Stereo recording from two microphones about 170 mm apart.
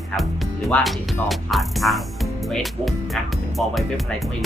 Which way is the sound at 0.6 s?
Centre (ahead or behind).